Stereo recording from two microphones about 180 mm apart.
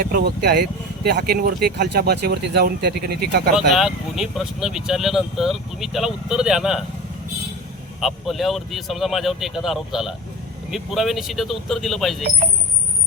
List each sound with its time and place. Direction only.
0.0 s speech: 60° right (ahead or behind)
3.5 s speech: 5° right (ahead or behind)
8.0 s speech: centre (ahead or behind)